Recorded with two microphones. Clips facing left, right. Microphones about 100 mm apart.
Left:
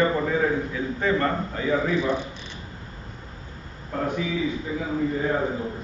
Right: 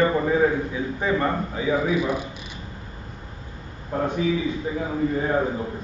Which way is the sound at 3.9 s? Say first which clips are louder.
Right 3 dB; 25° right (ahead or behind).